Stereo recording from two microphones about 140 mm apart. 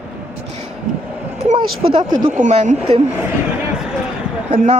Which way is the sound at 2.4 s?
55° right (ahead or behind).